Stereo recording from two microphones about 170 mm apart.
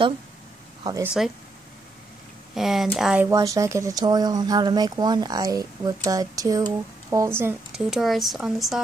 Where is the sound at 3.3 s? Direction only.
20° right (ahead or behind).